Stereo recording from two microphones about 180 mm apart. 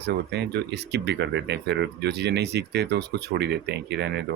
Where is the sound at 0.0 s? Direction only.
70° right (ahead or behind).